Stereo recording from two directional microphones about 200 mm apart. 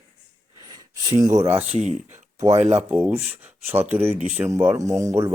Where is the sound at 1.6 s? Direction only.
35° right (ahead or behind).